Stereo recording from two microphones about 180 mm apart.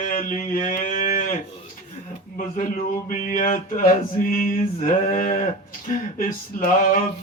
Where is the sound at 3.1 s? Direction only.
45° left (ahead or behind).